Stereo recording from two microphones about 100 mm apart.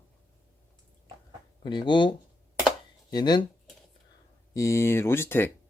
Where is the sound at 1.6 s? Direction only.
55° left (ahead or behind).